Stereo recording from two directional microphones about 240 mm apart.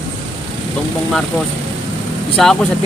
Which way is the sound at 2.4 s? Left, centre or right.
Centre.